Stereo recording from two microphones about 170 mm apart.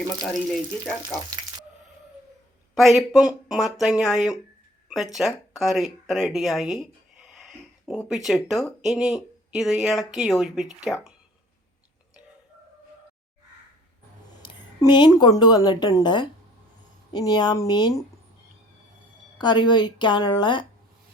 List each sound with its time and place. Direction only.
0.2 s speech: centre (ahead or behind)
2.7 s speech: centre (ahead or behind)
14.4 s a woman's voice: 25° left (ahead or behind)
19.4 s a woman's voice: 25° left (ahead or behind)